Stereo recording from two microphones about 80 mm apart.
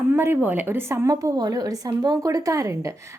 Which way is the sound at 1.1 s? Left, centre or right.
Right.